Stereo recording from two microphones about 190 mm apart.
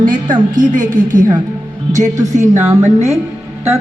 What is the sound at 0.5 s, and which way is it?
A woman's voice, 45° right (ahead or behind).